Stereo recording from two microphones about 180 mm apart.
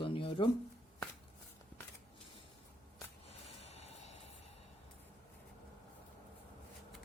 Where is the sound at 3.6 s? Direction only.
35° left (ahead or behind).